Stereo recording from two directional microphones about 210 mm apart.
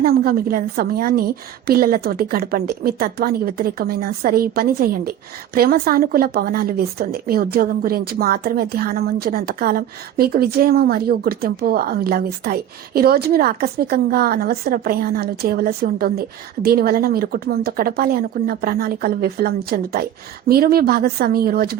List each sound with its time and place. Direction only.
0.0 s speech: 45° right (ahead or behind)